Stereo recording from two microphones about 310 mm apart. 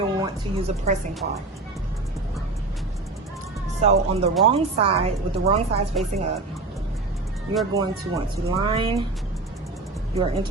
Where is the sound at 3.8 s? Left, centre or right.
Centre.